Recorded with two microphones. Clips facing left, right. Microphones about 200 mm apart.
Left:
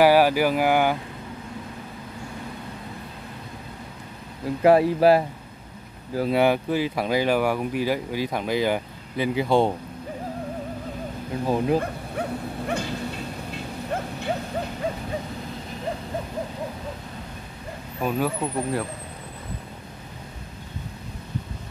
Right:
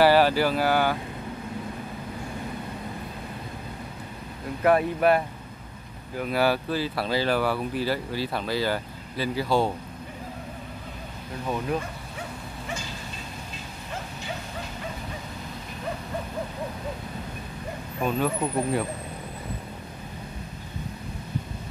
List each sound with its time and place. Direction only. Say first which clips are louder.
0.0 s speech: left 2 dB; 10° left (ahead or behind)
4.6 s speech: left 4 dB; 30° left (ahead or behind)
11.4 s speech: left 6 dB; 30° left (ahead or behind)
11.8 s dog: left 8 dB; 60° left (ahead or behind)
18.0 s speech: left 1 dB; 5° left (ahead or behind)